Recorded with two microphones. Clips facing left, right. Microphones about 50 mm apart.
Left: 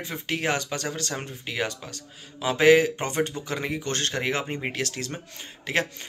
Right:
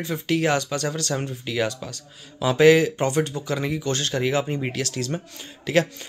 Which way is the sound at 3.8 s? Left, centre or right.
Left.